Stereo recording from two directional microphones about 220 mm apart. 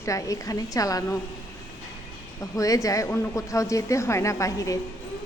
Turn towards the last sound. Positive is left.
turn(degrees=15)  # may be behind; listen again after turning